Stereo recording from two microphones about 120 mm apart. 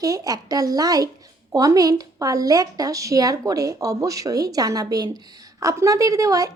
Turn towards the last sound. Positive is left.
turn(degrees=-30)  # may be behind; listen again after turning